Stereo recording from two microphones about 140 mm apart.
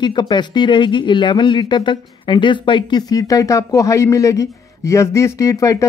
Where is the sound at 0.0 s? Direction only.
35° left (ahead or behind).